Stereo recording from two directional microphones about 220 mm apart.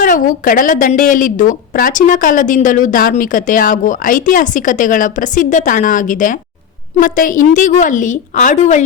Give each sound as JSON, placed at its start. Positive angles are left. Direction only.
{"t": 0.0, "sound": "a woman's voice", "side_deg": 40}